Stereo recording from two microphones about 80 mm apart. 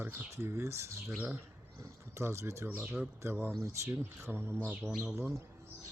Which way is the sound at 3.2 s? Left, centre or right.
Right.